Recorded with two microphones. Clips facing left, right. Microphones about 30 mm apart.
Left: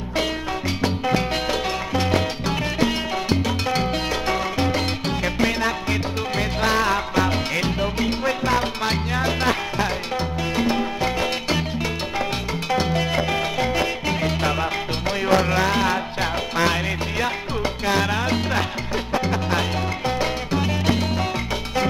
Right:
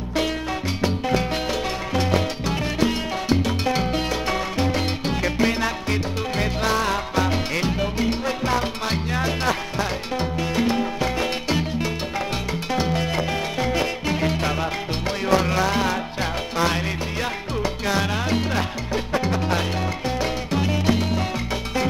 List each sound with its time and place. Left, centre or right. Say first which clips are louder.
0.8 s salsa music: even; centre
10.5 s music: left 1 dB; centre
17.9 s music: left 2 dB; centre
20.2 s music: left 1 dB; centre